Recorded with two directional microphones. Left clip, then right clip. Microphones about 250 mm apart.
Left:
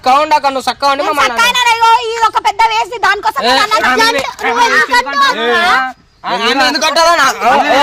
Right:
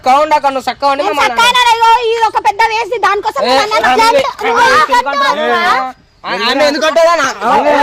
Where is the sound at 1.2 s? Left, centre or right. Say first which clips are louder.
Right 3 dB; left.